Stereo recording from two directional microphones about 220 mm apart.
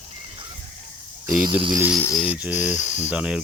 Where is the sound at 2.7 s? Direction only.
35° left (ahead or behind).